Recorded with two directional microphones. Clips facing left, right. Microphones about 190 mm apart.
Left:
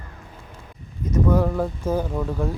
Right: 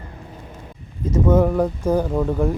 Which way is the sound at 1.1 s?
20° right (ahead or behind).